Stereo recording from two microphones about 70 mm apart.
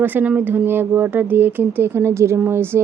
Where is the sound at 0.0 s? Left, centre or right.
Right.